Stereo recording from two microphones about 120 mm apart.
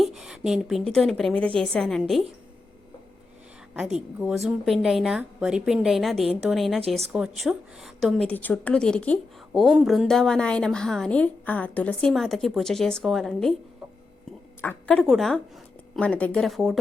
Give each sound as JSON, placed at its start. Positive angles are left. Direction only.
{"t": 0.0, "sound": "a woman's voice", "side_deg": -5}
{"t": 3.8, "sound": "a woman's voice", "side_deg": -5}
{"t": 8.3, "sound": "a woman's voice", "side_deg": 15}
{"t": 9.5, "sound": "a woman's voice", "side_deg": -5}
{"t": 14.6, "sound": "a woman's voice", "side_deg": 10}
{"t": 15.0, "sound": "a woman's voice", "side_deg": -5}
{"t": 16.0, "sound": "a woman's voice", "side_deg": 10}